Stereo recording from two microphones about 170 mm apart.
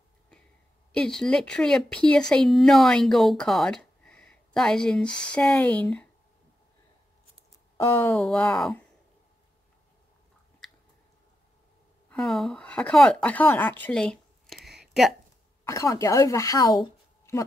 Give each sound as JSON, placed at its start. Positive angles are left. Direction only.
{"t": 0.9, "sound": "speech", "side_deg": 5}
{"t": 7.8, "sound": "speech", "side_deg": 15}
{"t": 12.1, "sound": "speech", "side_deg": 5}
{"t": 15.6, "sound": "a woman's voice", "side_deg": 20}